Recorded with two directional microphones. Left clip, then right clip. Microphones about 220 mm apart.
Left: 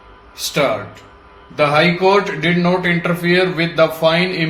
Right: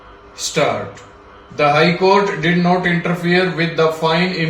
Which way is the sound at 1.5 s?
45° left (ahead or behind).